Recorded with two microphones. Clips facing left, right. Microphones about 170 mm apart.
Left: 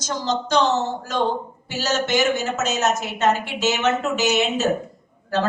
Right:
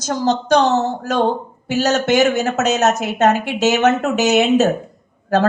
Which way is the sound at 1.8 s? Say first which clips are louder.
Right 6 dB; 65° right (ahead or behind).